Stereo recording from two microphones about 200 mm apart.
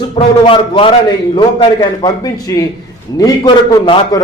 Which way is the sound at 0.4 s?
25° left (ahead or behind).